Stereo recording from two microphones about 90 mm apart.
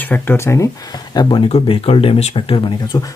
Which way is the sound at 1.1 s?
65° left (ahead or behind).